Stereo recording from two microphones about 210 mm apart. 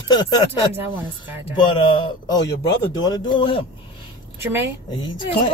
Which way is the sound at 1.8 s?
25° left (ahead or behind).